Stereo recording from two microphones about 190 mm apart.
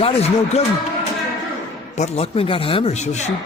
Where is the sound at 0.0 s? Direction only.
35° left (ahead or behind).